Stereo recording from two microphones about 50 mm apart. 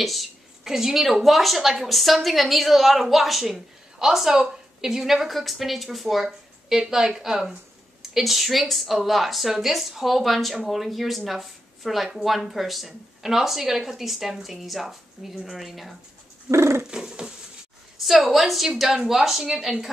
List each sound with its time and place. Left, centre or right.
0.0 s a woman's voice: centre
16.4 s dog: right
16.9 s dog: centre
18.0 s a woman's voice: centre